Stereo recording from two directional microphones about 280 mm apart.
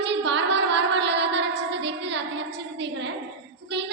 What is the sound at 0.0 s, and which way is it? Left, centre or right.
Music, right.